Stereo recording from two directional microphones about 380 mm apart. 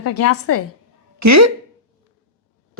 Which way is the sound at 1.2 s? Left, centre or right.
Right.